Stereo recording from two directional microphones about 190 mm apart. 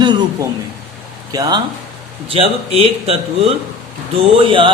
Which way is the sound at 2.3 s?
30° right (ahead or behind).